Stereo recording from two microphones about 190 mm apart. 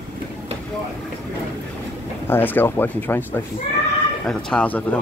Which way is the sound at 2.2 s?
10° left (ahead or behind).